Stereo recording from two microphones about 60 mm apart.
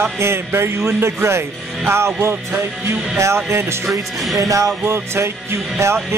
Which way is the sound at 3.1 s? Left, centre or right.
Right.